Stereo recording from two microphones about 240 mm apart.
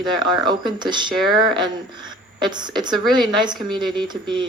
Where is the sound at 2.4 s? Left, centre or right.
Centre.